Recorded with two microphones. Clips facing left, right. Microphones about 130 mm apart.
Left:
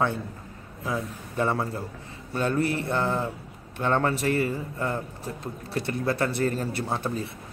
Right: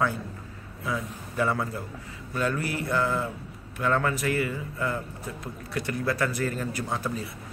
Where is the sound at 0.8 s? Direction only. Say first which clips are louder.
Left 1 dB; 30° left (ahead or behind).